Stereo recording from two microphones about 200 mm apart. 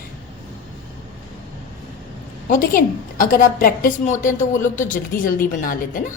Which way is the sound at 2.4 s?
45° left (ahead or behind).